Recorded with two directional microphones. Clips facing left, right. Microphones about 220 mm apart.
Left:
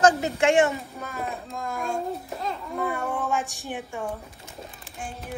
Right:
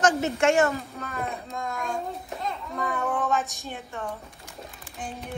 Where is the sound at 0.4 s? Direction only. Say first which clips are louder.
Left 1 dB; 30° left (ahead or behind).